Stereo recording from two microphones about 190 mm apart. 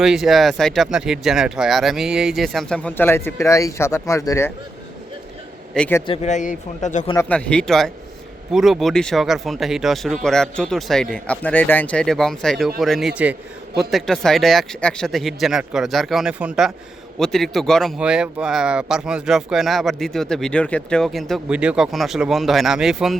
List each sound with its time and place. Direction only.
0.0 s speech: centre (ahead or behind); by 4.5 s 15° left (ahead or behind)
5.7 s speech: 5° left (ahead or behind)
6.1 s speech: 40° left (ahead or behind)
7.3 s speech: 5° left (ahead or behind)